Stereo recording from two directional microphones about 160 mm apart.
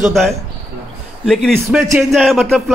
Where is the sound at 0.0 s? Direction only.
Centre (ahead or behind).